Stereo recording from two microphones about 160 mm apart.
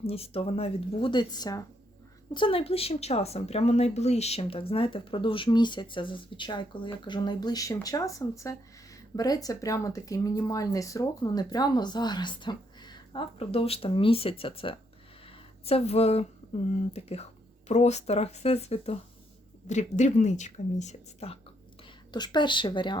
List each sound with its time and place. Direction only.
0.1 s a woman's voice: 40° left (ahead or behind)
15.3 s a sound: 40° left (ahead or behind)
16.7 s speech: 40° left (ahead or behind)
22.1 s a woman's voice: 25° left (ahead or behind)